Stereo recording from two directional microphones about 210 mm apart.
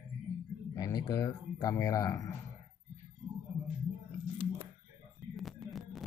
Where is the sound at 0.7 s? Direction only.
15° left (ahead or behind).